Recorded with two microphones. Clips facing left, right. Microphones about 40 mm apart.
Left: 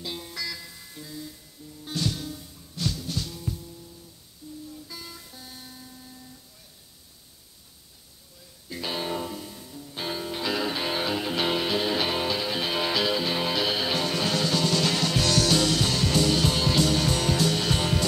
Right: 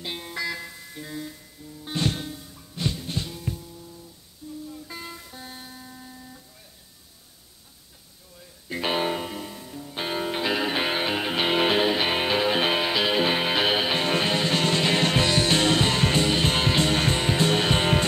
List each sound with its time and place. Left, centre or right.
0.0 s music: right
1.0 s music: right; by 3.7 s centre
4.7 s music: right
8.6 s music: right
12.8 s music: right
13.1 s music: right